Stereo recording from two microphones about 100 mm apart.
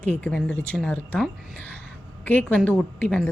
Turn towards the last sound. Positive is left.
turn(degrees=15)  # may be behind; listen again after turning